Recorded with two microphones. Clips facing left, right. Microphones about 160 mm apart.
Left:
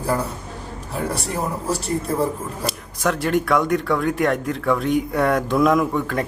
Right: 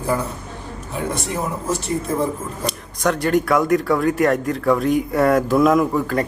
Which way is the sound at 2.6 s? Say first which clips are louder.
Right 2 dB; 5° left (ahead or behind).